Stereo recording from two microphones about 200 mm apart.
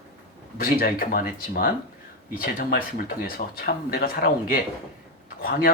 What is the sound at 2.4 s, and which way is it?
Speech, 45° left (ahead or behind).